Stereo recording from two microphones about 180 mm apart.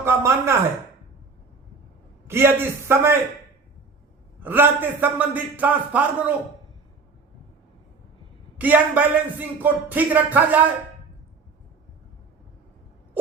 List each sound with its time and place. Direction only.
0.0 s speech: 15° right (ahead or behind)
2.2 s speech: 15° right (ahead or behind)
4.4 s speech: 10° right (ahead or behind)
8.5 s speech: 10° right (ahead or behind)